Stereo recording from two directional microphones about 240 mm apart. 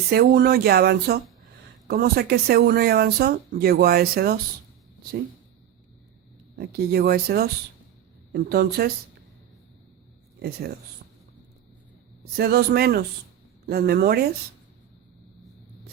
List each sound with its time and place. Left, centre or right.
0.1 s speech: right
6.6 s speech: right
12.4 s speech: right